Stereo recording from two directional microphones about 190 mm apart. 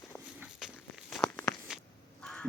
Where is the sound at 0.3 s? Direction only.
5° right (ahead or behind).